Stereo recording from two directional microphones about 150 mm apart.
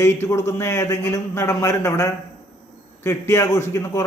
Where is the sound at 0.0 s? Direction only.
20° left (ahead or behind).